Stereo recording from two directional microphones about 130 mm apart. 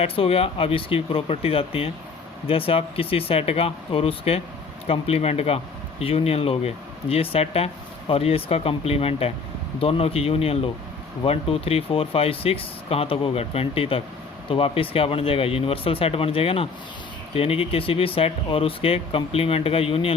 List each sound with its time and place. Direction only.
0.0 s speech: 50° left (ahead or behind)